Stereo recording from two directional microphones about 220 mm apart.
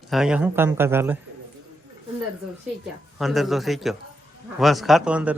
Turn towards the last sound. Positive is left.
turn(degrees=-5)  # may be behind; listen again after turning